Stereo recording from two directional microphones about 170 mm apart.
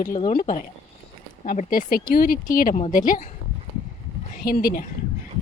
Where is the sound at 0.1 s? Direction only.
35° left (ahead or behind).